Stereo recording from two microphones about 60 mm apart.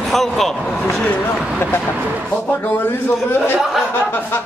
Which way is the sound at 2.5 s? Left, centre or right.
Left.